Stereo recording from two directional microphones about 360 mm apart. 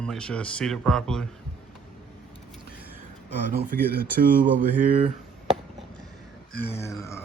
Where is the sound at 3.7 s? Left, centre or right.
Right.